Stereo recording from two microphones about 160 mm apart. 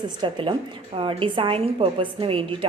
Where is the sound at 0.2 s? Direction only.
30° right (ahead or behind).